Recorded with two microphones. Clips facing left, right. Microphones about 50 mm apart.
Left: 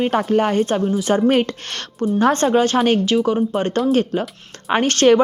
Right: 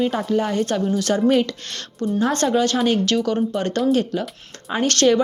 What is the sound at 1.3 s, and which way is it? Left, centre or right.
A woman's voice, left.